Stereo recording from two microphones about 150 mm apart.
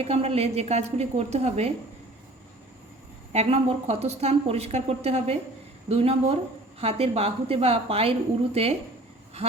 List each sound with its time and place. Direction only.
0.0 s speech: 40° right (ahead or behind)
3.3 s a woman's voice: 45° right (ahead or behind)